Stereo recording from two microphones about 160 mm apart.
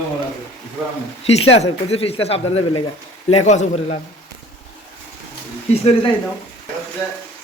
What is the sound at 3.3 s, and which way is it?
Speech, 45° left (ahead or behind).